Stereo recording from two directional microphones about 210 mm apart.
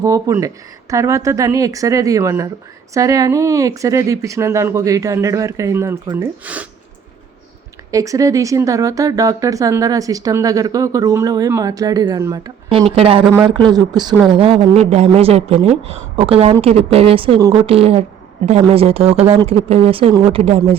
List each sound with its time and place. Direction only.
0.0 s speech: 15° right (ahead or behind)
7.9 s speech: 15° right (ahead or behind)